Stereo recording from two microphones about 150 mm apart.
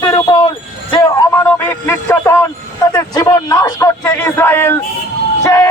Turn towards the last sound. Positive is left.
turn(degrees=20)  # may be behind; listen again after turning